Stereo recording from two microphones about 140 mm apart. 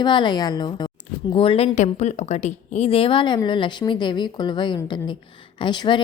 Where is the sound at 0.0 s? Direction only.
35° left (ahead or behind).